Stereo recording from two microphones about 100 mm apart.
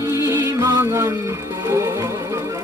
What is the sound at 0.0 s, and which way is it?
Music, 30° right (ahead or behind).